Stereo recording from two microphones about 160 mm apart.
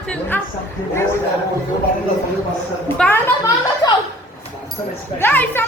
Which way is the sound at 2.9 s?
5° left (ahead or behind).